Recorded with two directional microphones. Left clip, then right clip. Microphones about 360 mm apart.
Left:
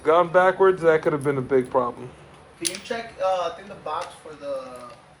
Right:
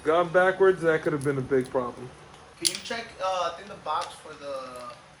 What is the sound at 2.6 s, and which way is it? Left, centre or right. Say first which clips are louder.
Speech: left 1 dB; centre.